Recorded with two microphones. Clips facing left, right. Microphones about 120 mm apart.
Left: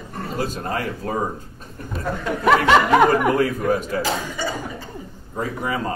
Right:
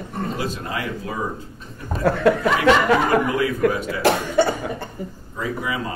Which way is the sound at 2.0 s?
75° right (ahead or behind).